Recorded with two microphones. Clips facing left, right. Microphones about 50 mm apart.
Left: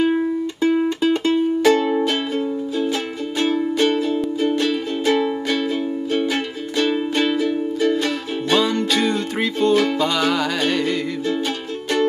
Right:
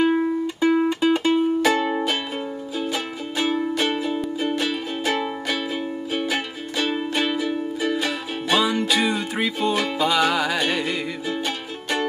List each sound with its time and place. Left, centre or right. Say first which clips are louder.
0.0 s music: left 1 dB; centre